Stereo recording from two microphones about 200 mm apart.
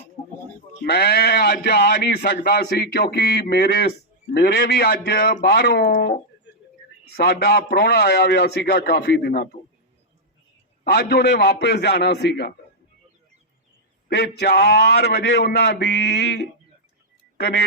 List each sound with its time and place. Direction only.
0.9 s speech: 55° left (ahead or behind)
6.5 s a sound: 65° left (ahead or behind)
7.2 s speech: 55° left (ahead or behind)
10.8 s a man's voice: 55° left (ahead or behind)
14.1 s a man's voice: 55° left (ahead or behind)